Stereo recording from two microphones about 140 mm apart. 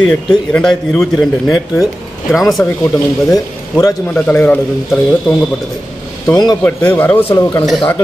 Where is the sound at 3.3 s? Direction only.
25° left (ahead or behind).